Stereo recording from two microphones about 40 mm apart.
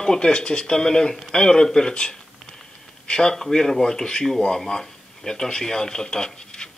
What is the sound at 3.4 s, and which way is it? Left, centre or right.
Speech, centre.